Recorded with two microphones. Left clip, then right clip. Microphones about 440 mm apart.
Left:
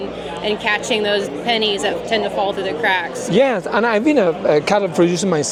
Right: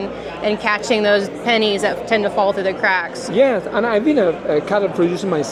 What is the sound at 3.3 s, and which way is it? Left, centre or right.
A woman's voice, left.